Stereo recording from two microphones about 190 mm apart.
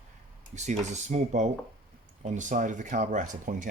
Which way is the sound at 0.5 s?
40° right (ahead or behind).